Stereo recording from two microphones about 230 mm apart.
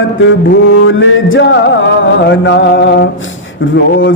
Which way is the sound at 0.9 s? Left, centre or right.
Left.